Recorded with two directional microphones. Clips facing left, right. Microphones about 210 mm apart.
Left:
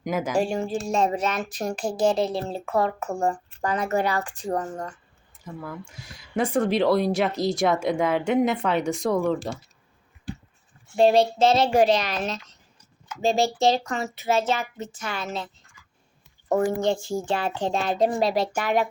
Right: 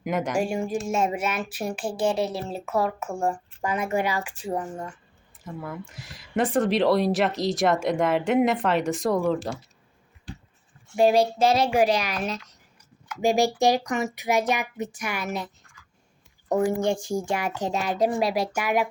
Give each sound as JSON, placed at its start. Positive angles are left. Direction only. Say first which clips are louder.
{"t": 0.0, "sound": "speech", "louder": "even", "side_deg": 0}
{"t": 0.3, "sound": "a child's voice", "louder": "left 1 dB", "side_deg": -10}
{"t": 10.9, "sound": "a child's voice", "louder": "left 1 dB", "side_deg": -10}
{"t": 13.2, "sound": "a child's voice", "louder": "right 1 dB", "side_deg": -15}
{"t": 15.2, "sound": "speech", "louder": "right 1 dB", "side_deg": 25}
{"t": 16.5, "sound": "a child's voice", "louder": "left 1 dB", "side_deg": -10}